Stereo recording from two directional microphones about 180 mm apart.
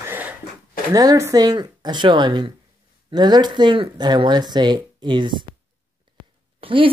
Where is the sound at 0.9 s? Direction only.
20° right (ahead or behind).